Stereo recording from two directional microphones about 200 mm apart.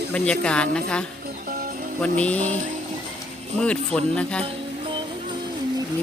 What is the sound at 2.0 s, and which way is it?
Speech, 5° left (ahead or behind).